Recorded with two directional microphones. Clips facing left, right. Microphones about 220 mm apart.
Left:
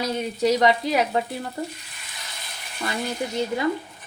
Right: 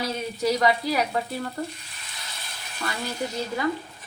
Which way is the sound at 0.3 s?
20° left (ahead or behind).